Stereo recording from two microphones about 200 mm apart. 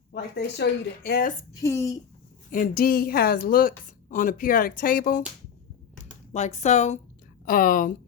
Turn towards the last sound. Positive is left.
turn(degrees=45)  # may be behind; listen again after turning